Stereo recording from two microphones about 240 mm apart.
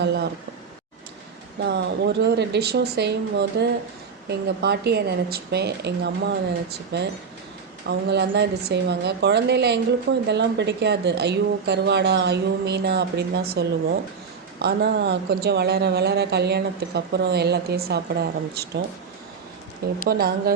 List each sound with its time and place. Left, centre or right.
0.0 s a woman's voice: right
1.6 s a woman's voice: right
20.1 s speech: right